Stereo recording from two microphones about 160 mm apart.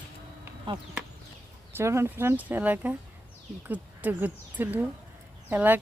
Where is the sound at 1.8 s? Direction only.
15° right (ahead or behind).